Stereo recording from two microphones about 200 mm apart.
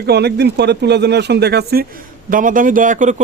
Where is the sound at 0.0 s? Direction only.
55° right (ahead or behind).